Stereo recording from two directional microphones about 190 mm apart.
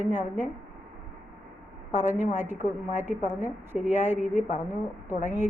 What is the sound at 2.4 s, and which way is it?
A woman's voice, 10° right (ahead or behind).